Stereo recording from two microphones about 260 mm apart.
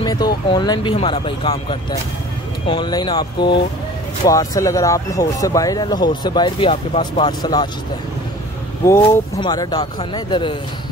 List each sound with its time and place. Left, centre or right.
0.0 s a sound: centre
0.5 s speech: centre
8.8 s speech: centre